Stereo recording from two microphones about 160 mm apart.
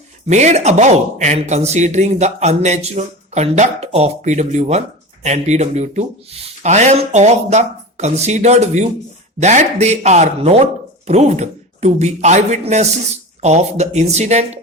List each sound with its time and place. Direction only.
0.3 s speech: 45° right (ahead or behind)